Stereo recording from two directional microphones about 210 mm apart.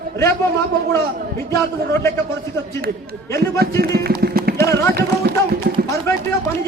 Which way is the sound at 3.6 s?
50° right (ahead or behind).